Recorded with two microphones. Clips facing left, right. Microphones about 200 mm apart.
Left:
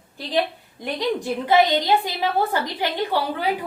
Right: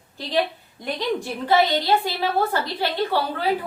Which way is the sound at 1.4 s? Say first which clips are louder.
Left 1 dB; 15° left (ahead or behind).